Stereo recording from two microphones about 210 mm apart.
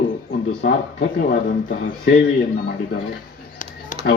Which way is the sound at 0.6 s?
40° left (ahead or behind).